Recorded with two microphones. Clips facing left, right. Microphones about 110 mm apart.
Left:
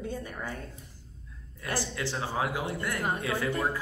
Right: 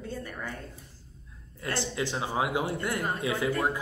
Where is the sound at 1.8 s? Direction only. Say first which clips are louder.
Right 2 dB; 20° right (ahead or behind).